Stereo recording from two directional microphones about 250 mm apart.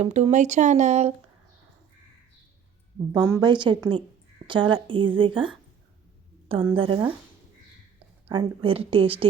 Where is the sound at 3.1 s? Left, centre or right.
Centre.